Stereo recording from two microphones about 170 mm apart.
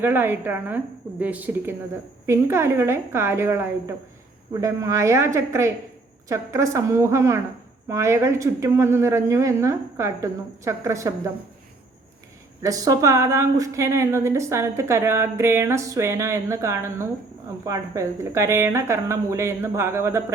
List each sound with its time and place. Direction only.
0.0 s a woman's voice: 15° right (ahead or behind)
12.6 s a woman's voice: 20° right (ahead or behind)